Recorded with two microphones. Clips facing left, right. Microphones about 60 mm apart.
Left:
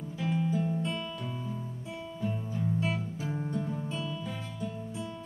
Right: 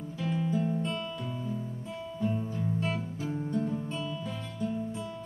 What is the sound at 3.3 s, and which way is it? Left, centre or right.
Music, centre.